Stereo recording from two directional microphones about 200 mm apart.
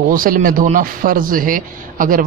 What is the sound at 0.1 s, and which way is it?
Speech, 45° right (ahead or behind).